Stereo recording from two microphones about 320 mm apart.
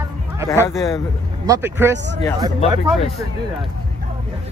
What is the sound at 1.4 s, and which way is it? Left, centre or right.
Speech, centre.